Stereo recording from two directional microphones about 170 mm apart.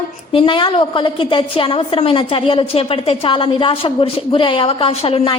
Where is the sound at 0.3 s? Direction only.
30° left (ahead or behind).